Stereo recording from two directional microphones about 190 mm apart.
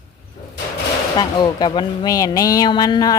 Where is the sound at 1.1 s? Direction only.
25° left (ahead or behind).